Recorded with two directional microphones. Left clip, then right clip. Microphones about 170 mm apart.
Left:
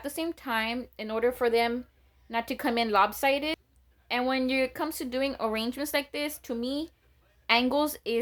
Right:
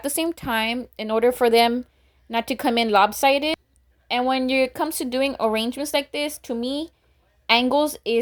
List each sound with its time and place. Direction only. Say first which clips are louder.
0.0 s speech: right 8 dB; 40° right (ahead or behind)
2.3 s speech: right 7 dB; 30° right (ahead or behind)